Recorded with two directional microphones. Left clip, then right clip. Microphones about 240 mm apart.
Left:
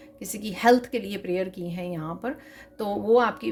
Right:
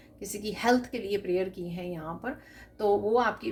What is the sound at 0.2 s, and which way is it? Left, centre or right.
Speech, left.